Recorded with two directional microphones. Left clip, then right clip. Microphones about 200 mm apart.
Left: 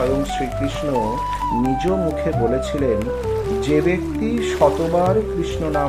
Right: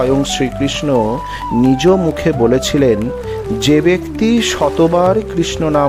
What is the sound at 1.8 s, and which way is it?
Speech, 50° right (ahead or behind).